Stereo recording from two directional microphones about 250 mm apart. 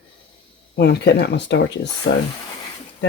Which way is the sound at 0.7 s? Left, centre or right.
Left.